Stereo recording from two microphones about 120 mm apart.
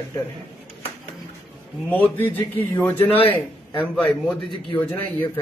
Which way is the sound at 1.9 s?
15° left (ahead or behind).